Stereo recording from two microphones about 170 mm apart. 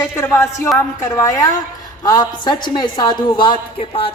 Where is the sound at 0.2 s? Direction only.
15° left (ahead or behind).